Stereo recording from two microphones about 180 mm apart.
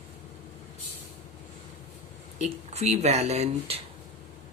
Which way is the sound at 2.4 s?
40° right (ahead or behind).